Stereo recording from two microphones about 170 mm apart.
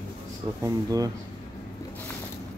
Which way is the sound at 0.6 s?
20° right (ahead or behind).